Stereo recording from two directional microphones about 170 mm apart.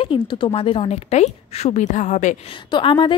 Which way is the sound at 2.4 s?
30° left (ahead or behind).